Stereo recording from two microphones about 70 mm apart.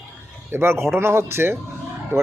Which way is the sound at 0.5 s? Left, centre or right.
Right.